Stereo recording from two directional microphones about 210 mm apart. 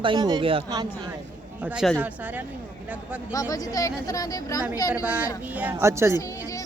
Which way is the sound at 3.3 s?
15° left (ahead or behind).